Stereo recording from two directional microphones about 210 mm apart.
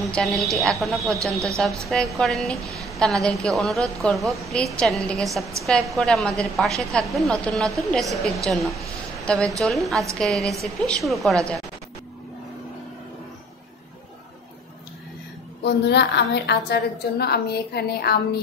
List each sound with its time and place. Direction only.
0.0 s a woman's voice: centre (ahead or behind)
2.8 s a sound: centre (ahead or behind)
3.3 s a woman's voice: centre (ahead or behind)
15.6 s a woman's voice: 55° left (ahead or behind)